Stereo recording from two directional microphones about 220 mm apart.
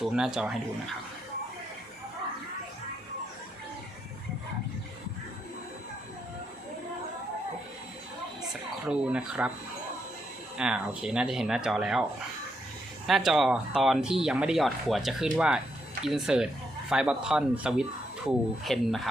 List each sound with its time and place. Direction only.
0.0 s speech: centre (ahead or behind)
8.9 s speech: 5° right (ahead or behind)
10.6 s speech: 5° right (ahead or behind)
13.1 s speech: centre (ahead or behind)